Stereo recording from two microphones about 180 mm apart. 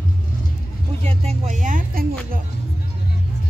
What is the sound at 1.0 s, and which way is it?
Speech, 35° right (ahead or behind).